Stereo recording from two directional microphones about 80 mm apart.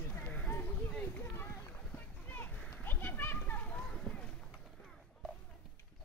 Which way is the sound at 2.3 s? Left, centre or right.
Left.